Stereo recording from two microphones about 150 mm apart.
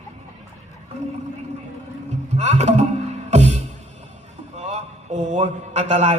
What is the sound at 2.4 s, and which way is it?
Speech, 50° right (ahead or behind).